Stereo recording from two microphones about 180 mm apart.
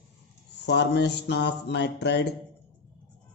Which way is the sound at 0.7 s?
70° left (ahead or behind).